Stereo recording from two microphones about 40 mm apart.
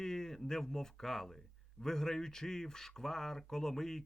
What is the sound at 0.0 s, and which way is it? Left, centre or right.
Speech, centre.